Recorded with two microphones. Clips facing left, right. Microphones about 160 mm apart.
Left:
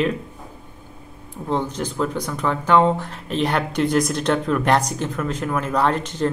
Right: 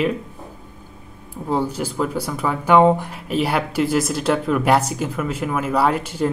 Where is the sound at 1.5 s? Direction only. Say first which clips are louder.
Right 2 dB; 10° right (ahead or behind).